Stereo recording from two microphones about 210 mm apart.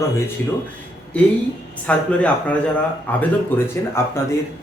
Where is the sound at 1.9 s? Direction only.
5° left (ahead or behind).